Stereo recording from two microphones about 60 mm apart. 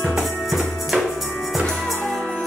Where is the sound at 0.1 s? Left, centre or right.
Centre.